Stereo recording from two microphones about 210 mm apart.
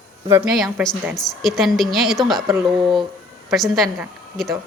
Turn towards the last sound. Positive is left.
turn(degrees=0)  # may be behind; listen again after turning